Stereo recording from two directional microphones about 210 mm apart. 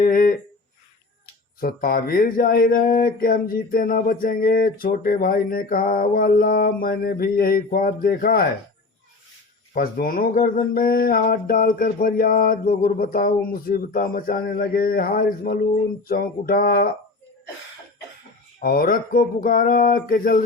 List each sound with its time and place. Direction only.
0.0 s a sound: 40° left (ahead or behind)
1.5 s speech: 45° left (ahead or behind)
9.7 s speech: 40° left (ahead or behind)
18.6 s speech: 45° left (ahead or behind)